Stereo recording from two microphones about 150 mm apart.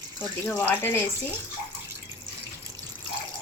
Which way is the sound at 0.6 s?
15° left (ahead or behind).